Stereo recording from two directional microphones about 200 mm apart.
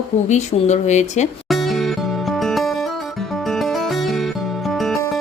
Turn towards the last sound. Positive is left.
turn(degrees=0)  # may be behind; listen again after turning